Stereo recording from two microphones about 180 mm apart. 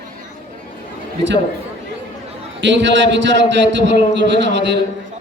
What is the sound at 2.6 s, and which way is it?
A man's voice, 85° right.